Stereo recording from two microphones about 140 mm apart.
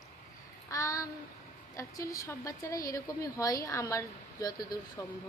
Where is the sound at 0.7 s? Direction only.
25° left (ahead or behind).